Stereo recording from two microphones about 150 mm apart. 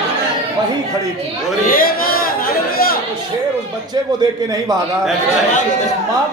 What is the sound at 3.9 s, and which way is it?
Speech, 25° right (ahead or behind).